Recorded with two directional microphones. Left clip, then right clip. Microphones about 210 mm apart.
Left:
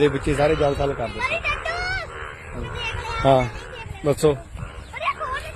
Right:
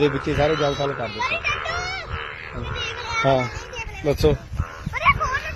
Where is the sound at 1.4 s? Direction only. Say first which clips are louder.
Even; 20° left (ahead or behind).